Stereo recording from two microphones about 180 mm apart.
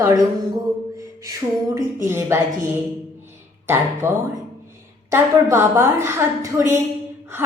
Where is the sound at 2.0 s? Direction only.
15° right (ahead or behind).